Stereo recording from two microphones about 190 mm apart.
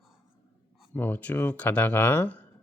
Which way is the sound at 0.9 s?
10° left (ahead or behind).